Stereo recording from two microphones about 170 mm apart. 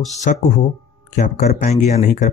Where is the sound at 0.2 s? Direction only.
50° left (ahead or behind).